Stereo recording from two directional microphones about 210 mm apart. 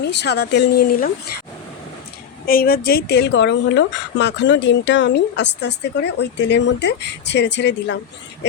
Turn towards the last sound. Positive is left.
turn(degrees=55)  # may be behind; listen again after turning